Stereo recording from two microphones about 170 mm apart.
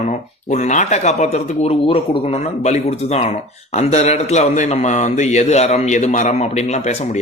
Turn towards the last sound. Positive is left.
turn(degrees=40)  # may be behind; listen again after turning